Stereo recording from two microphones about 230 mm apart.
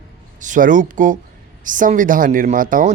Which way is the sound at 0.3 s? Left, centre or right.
Right.